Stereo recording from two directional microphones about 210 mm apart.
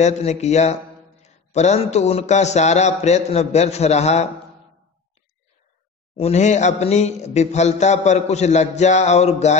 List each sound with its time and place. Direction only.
0.0 s speech: 30° left (ahead or behind)
6.1 s speech: 30° left (ahead or behind)